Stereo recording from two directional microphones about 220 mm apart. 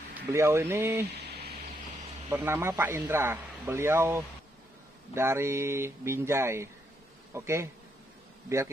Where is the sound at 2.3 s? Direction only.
10° right (ahead or behind).